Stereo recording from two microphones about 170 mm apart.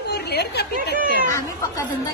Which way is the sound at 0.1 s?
70° left (ahead or behind).